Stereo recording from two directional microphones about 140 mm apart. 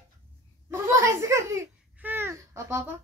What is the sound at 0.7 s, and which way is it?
Babbling, 20° right (ahead or behind).